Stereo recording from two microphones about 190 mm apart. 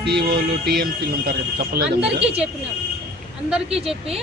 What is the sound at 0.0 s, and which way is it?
Speech, 60° right (ahead or behind).